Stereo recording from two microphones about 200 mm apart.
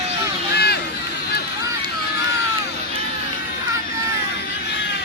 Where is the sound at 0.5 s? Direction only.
55° left (ahead or behind).